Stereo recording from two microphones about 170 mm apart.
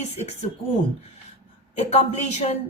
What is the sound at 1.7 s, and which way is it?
Speech, 40° left (ahead or behind).